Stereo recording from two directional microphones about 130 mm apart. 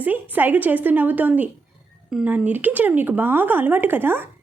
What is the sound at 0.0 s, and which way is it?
Speech, 15° right (ahead or behind).